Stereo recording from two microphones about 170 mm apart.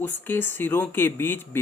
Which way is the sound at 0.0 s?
10° left (ahead or behind).